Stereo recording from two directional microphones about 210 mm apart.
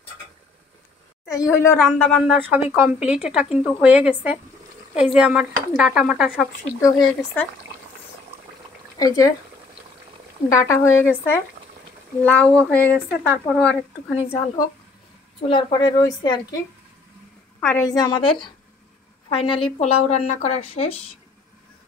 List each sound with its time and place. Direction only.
1.2 s a sound: 15° left (ahead or behind)
1.6 s a woman's voice: 15° left (ahead or behind)
2.5 s a woman's voice: 10° right (ahead or behind)
8.9 s speech: 15° left (ahead or behind)
10.5 s speech: 15° left (ahead or behind)
15.4 s a woman's voice: 20° left (ahead or behind)
17.6 s a woman's voice: 10° left (ahead or behind); by 21.0 s 30° left (ahead or behind)